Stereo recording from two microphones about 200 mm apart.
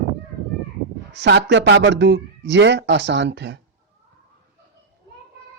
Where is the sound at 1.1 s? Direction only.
60° right (ahead or behind).